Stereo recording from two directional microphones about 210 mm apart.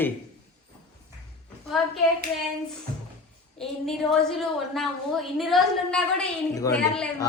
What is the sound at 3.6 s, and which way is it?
A woman's voice, centre (ahead or behind).